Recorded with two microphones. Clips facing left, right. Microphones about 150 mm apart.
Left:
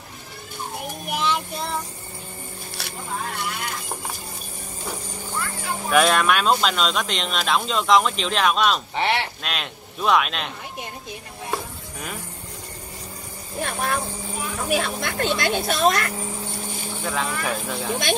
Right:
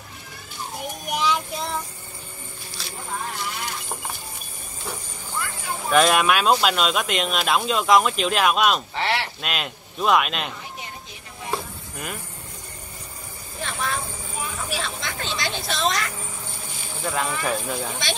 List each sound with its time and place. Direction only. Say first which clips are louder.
1.0 s child singing: right 1 dB; centre (ahead or behind)
2.8 s a sound: left 1 dB; 65° left (ahead or behind)
5.9 s speech: even; 5° left (ahead or behind)
8.9 s speech: left 2 dB; 20° left (ahead or behind)
9.4 s speech: right 1 dB; centre (ahead or behind)
11.5 s a sound: even; centre (ahead or behind)
13.6 s speech: left 3 dB; 50° left (ahead or behind)
17.0 s speech: right 1 dB; centre (ahead or behind)